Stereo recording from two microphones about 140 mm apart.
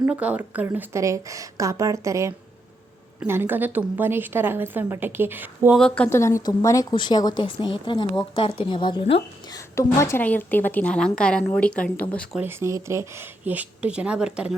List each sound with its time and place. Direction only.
0.1 s a woman's voice: 10° right (ahead or behind)
5.7 s a woman's voice: 5° left (ahead or behind)
6.1 s a woman's voice: 20° left (ahead or behind); by 9.2 s 40° left (ahead or behind)
9.5 s a woman's voice: 20° left (ahead or behind)
12.4 s a woman's voice: 15° right (ahead or behind)